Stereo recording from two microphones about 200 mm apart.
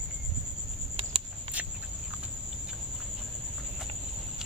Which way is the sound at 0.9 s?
30° right (ahead or behind).